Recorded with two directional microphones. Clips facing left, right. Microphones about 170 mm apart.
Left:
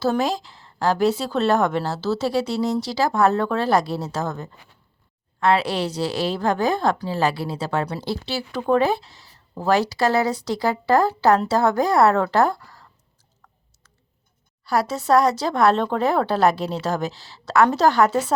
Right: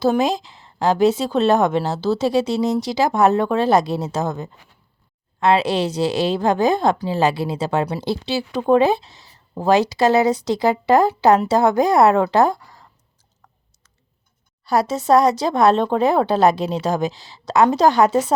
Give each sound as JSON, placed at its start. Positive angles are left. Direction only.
{"t": 0.0, "sound": "speech", "side_deg": -20}
{"t": 14.6, "sound": "speech", "side_deg": -20}